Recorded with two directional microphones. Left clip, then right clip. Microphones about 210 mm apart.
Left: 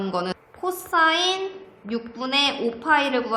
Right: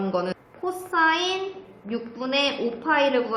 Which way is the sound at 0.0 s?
45° left (ahead or behind).